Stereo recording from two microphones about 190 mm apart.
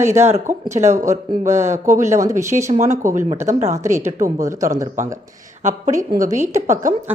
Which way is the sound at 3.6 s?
35° right (ahead or behind).